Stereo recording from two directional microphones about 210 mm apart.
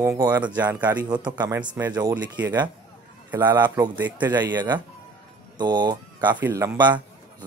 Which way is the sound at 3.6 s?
20° right (ahead or behind).